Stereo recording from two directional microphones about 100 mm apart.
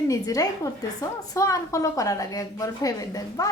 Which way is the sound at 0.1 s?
35° left (ahead or behind).